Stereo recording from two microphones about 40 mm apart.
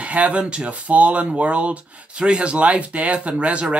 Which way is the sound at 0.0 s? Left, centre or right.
Right.